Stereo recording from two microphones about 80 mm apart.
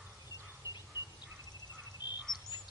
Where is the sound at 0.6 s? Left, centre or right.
Right.